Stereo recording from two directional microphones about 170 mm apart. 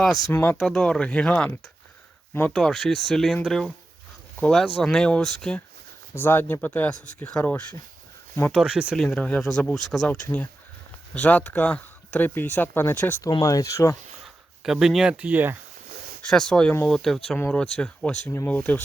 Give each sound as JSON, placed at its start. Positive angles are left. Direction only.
{"t": 0.3, "sound": "speech", "side_deg": 10}
{"t": 8.5, "sound": "speech", "side_deg": -5}
{"t": 9.0, "sound": "speech", "side_deg": 5}
{"t": 10.2, "sound": "speech", "side_deg": 10}
{"t": 14.6, "sound": "speech", "side_deg": -5}
{"t": 16.2, "sound": "speech", "side_deg": 5}